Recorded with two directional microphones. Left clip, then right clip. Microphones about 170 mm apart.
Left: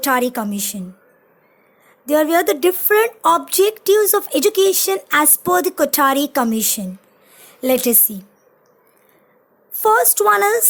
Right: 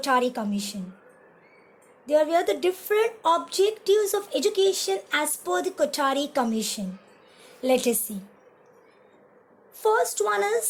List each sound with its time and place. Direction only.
0.0 s a woman's voice: 40° left (ahead or behind)
2.0 s a woman's voice: 45° left (ahead or behind)
9.7 s a woman's voice: 45° left (ahead or behind)